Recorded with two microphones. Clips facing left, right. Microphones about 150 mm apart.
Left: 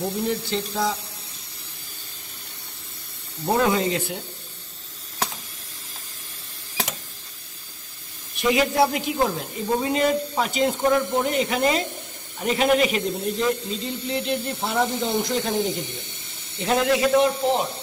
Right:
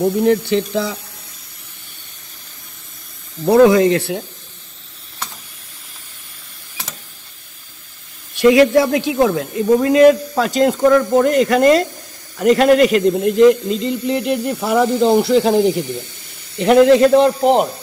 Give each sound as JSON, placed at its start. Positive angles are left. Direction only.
{"t": 0.2, "sound": "speech", "side_deg": -70}
{"t": 3.4, "sound": "a man's voice", "side_deg": -85}
{"t": 8.4, "sound": "a man's voice", "side_deg": -90}
{"t": 14.3, "sound": "speech", "side_deg": -65}
{"t": 15.7, "sound": "speech", "side_deg": 20}
{"t": 16.5, "sound": "speech", "side_deg": -65}